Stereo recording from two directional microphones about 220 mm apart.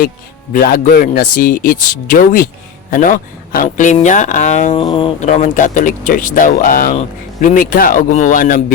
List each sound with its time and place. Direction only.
0.5 s speech: 40° left (ahead or behind)
3.5 s speech: 35° left (ahead or behind)